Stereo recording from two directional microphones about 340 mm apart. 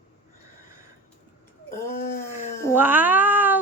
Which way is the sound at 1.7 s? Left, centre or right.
Left.